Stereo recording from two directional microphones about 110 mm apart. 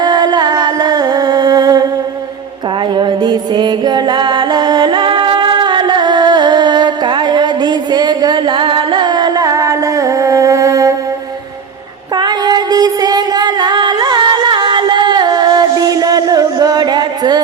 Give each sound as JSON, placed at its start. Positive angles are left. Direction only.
{"t": 0.0, "sound": "humming", "side_deg": -40}
{"t": 2.9, "sound": "music", "side_deg": -45}
{"t": 12.1, "sound": "female singing", "side_deg": -40}